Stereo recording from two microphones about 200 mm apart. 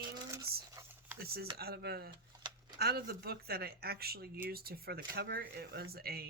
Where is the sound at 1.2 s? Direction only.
50° right (ahead or behind).